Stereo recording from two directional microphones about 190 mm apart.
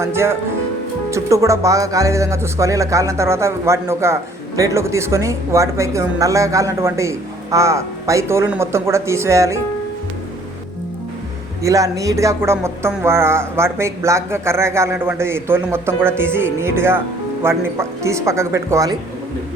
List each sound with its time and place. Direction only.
0.0 s speech: 15° right (ahead or behind)
11.6 s speech: 15° right (ahead or behind)